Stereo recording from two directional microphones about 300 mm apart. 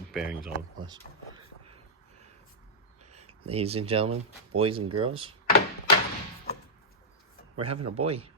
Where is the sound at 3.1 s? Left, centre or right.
Centre.